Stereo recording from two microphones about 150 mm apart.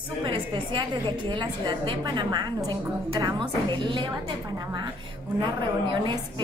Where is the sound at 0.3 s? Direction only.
35° right (ahead or behind).